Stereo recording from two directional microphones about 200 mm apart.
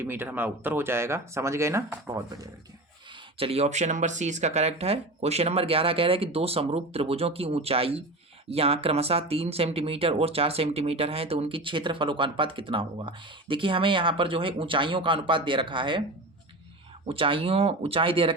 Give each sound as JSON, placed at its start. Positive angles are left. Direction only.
{"t": 0.0, "sound": "speech", "side_deg": -10}
{"t": 3.3, "sound": "speech", "side_deg": -30}
{"t": 17.1, "sound": "speech", "side_deg": -25}